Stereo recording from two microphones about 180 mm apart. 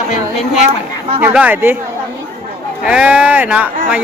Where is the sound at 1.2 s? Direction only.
10° right (ahead or behind).